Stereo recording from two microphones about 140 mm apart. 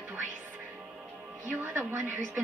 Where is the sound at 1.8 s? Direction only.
15° right (ahead or behind).